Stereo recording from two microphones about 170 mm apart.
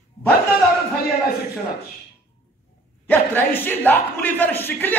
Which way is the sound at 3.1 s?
10° left (ahead or behind).